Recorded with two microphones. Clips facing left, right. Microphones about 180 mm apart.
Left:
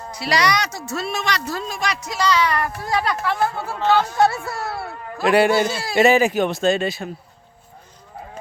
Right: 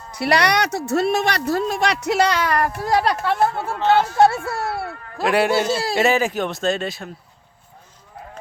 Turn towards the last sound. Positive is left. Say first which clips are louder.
# left 3 dB
turn(degrees=0)  # may be behind; listen again after turning